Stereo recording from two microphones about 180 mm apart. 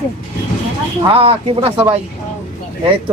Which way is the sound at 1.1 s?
30° right (ahead or behind).